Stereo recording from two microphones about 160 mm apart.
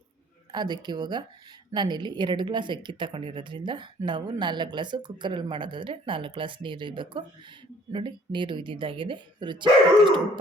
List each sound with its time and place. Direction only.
0.5 s speech: 25° right (ahead or behind)